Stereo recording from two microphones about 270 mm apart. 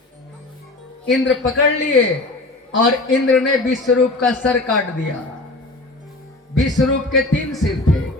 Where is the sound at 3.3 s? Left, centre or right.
Centre.